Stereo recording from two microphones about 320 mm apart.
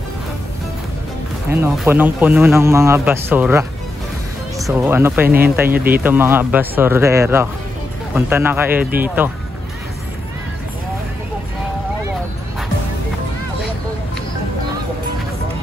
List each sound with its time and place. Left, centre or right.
1.5 s a man's voice: centre
4.6 s a man's voice: centre
5.7 s speech: right
6.0 s a man's voice: centre